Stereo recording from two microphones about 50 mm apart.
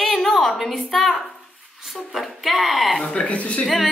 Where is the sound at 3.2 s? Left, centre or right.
Left.